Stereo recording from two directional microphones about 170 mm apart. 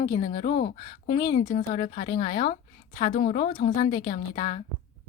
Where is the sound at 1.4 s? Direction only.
50° left (ahead or behind).